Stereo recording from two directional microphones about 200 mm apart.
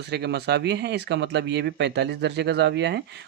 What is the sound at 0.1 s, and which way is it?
Speech, 55° right (ahead or behind).